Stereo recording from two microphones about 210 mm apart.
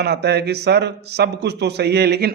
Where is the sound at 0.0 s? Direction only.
50° right (ahead or behind).